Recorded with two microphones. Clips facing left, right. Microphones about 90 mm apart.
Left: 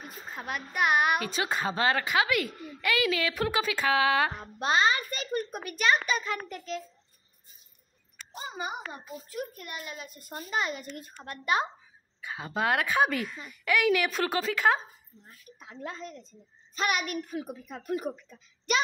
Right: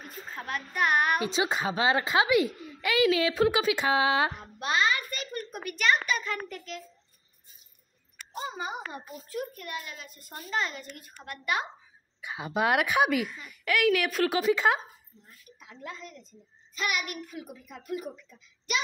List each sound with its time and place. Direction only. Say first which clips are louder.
0.0 s speech: even; 10° left (ahead or behind)
1.2 s a woman's voice: right 2 dB; 20° right (ahead or behind)
4.6 s a child's voice: left 2 dB; 30° left (ahead or behind)
9.6 s a child's voice: right 1 dB; 20° left (ahead or behind)
12.2 s a woman's voice: right 2 dB; 15° right (ahead or behind); by 14.3 s centre (ahead or behind)
14.3 s a woman's voice: right 1 dB; 15° right (ahead or behind)
15.6 s a child's voice: left 3 dB; 35° left (ahead or behind)